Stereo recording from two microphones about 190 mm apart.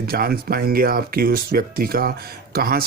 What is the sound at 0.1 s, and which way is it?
Speech, 55° right (ahead or behind).